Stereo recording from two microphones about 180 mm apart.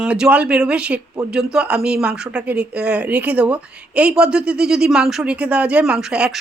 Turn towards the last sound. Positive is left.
turn(degrees=-5)  # may be behind; listen again after turning